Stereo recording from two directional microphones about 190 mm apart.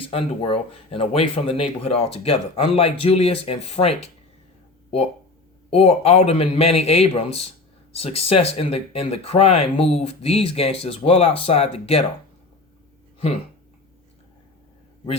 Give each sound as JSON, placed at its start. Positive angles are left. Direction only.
{"t": 0.1, "sound": "speech", "side_deg": 30}
{"t": 5.7, "sound": "speech", "side_deg": 30}